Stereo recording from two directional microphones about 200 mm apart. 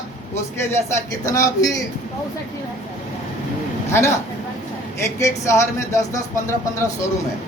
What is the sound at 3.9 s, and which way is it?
Speech, 15° left (ahead or behind).